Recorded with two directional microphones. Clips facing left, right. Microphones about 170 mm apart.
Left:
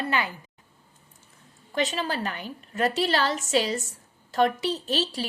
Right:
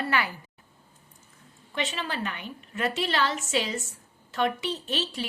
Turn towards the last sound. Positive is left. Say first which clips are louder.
# left 3 dB
turn(degrees=35)  # may be behind; listen again after turning